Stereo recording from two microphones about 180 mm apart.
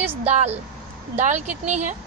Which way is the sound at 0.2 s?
35° right (ahead or behind).